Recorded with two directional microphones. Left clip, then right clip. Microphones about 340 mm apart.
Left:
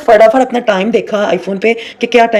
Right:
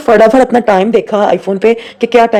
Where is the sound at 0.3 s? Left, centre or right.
Right.